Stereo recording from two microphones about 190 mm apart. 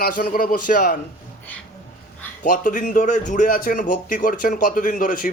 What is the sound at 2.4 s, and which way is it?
Speech, 45° left (ahead or behind).